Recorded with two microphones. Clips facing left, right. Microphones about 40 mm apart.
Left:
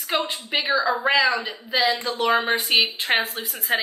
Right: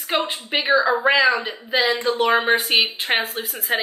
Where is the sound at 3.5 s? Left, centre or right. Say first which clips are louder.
Even; centre.